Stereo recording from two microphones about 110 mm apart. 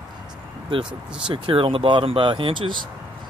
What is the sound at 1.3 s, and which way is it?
Speech, 55° right (ahead or behind).